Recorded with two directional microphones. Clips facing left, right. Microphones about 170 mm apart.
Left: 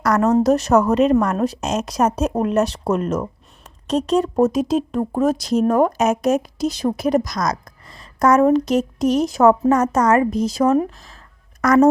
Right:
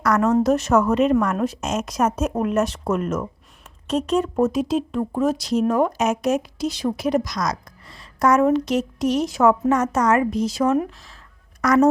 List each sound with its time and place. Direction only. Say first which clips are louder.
0.0 s a woman's voice: left 2 dB; 35° left (ahead or behind)